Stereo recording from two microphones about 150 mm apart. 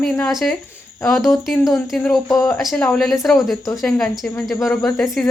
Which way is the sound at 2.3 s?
20° left (ahead or behind).